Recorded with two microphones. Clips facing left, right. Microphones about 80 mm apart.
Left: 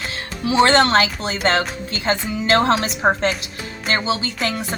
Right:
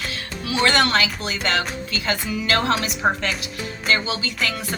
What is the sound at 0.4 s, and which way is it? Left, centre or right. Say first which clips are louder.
Speech: left 5 dB; left.